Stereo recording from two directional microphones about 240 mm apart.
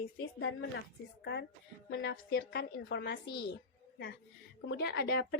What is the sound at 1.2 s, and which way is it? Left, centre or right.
A woman's voice, left.